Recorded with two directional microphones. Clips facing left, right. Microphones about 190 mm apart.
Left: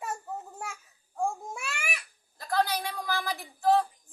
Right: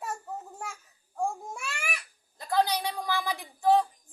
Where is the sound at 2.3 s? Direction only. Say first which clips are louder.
Right 2 dB; 20° right (ahead or behind).